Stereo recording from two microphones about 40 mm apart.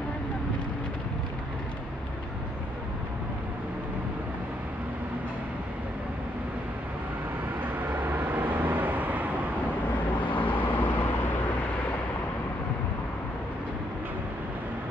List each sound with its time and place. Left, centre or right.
7.9 s vehicle: right
10.3 s vehicle: left